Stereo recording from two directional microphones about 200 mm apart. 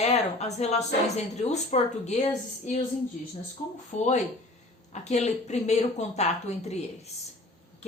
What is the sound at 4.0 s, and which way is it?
A woman's voice, 35° left (ahead or behind).